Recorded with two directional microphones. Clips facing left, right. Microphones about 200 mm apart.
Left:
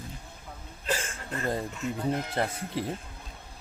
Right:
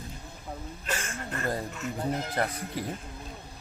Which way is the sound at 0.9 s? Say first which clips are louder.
Left 3 dB; 30° left (ahead or behind).